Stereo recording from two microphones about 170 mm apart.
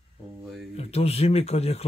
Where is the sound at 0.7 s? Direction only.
35° left (ahead or behind).